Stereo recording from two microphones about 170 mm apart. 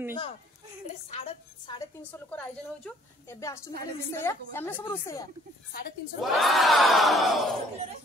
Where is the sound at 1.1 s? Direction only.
35° left (ahead or behind).